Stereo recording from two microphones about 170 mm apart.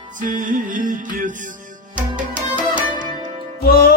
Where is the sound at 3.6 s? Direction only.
65° left (ahead or behind).